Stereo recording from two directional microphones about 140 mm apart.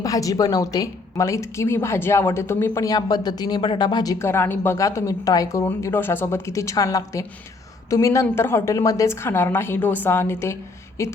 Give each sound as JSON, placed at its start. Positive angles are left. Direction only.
{"t": 0.0, "sound": "a woman's voice", "side_deg": 25}